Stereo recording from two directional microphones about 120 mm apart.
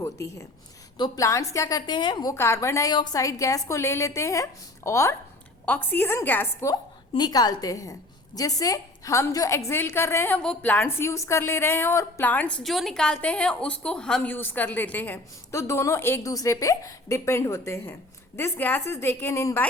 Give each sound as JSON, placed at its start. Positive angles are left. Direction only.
{"t": 0.0, "sound": "a woman's voice", "side_deg": 25}
{"t": 0.9, "sound": "a woman's voice", "side_deg": 40}
{"t": 1.2, "sound": "a woman's voice", "side_deg": 25}
{"t": 2.3, "sound": "a woman's voice", "side_deg": 20}
{"t": 7.1, "sound": "a woman's voice", "side_deg": 35}
{"t": 12.6, "sound": "a woman's voice", "side_deg": 0}